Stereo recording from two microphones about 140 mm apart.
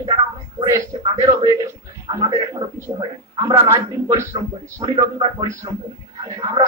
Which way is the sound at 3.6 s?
20° right (ahead or behind).